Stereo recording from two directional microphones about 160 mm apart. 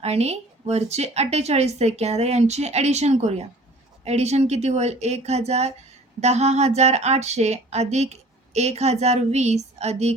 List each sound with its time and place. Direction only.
0.0 s speech: 40° right (ahead or behind)